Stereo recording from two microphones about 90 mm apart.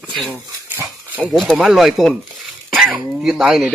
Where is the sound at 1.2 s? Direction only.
5° left (ahead or behind).